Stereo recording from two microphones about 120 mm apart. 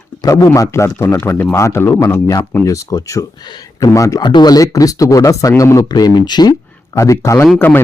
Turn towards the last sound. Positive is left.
turn(degrees=15)  # may be behind; listen again after turning